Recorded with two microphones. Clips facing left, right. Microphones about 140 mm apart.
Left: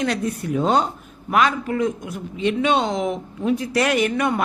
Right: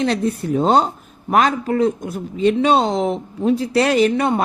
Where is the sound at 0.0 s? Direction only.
30° right (ahead or behind).